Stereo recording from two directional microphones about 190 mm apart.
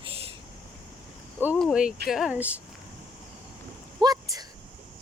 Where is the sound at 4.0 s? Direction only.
20° right (ahead or behind).